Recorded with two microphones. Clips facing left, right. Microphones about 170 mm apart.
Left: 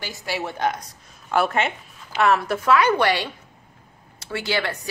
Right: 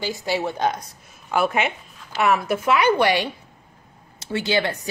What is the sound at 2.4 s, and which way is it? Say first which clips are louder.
A woman's voice: even; 15° right (ahead or behind).